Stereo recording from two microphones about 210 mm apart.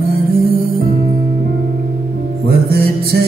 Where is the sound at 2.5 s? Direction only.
45° right (ahead or behind).